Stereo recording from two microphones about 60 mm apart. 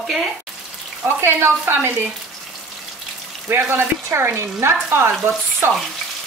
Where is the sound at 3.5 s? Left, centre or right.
Right.